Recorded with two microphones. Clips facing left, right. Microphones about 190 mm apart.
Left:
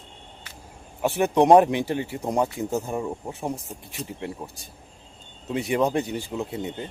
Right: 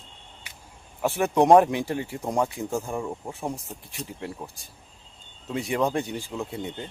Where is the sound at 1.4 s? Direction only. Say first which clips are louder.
Left 1 dB; 15° left (ahead or behind).